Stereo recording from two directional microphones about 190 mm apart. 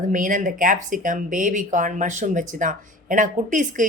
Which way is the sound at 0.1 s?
45° right (ahead or behind).